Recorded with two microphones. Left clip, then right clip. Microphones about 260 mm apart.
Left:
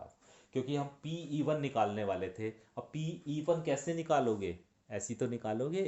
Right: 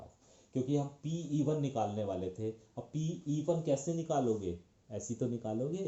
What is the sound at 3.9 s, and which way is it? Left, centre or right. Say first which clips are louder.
Speech: left 2 dB; left.